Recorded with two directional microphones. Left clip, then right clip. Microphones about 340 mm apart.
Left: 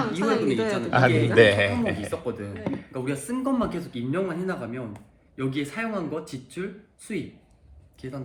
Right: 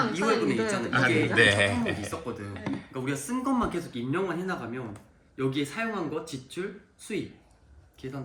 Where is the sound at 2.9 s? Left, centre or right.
Centre.